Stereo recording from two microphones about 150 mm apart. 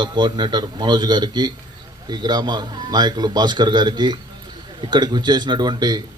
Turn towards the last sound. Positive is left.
turn(degrees=-30)  # may be behind; listen again after turning